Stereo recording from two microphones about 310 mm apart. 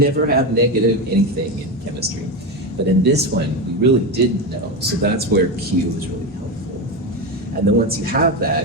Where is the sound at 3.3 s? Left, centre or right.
Right.